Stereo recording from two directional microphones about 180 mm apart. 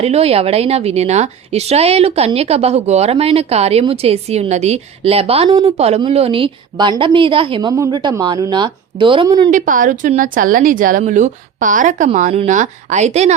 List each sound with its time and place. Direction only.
0.0 s a woman's voice: 35° right (ahead or behind)
9.5 s speech: 45° right (ahead or behind)